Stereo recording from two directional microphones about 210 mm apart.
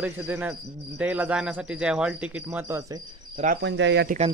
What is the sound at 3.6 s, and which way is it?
Speech, 55° right (ahead or behind).